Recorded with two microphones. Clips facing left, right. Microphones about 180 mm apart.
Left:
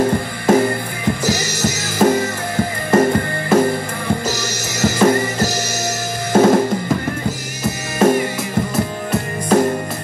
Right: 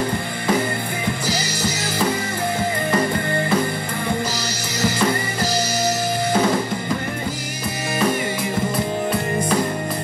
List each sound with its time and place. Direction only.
0.5 s music: 45° left (ahead or behind)
6.3 s drum kit: 45° left (ahead or behind)
8.0 s music: 45° left (ahead or behind)
9.5 s music: 45° left (ahead or behind)